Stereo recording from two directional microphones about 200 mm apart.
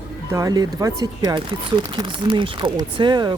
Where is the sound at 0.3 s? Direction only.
15° right (ahead or behind).